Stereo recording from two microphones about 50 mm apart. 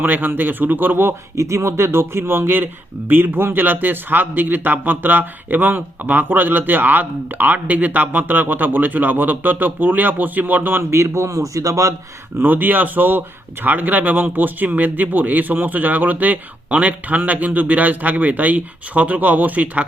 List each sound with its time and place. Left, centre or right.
0.0 s speech: right
1.4 s speech: right
10.9 s speech: right
12.4 s speech: right